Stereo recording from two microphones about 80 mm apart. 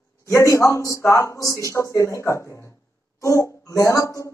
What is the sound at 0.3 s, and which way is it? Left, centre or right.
A man's voice, left.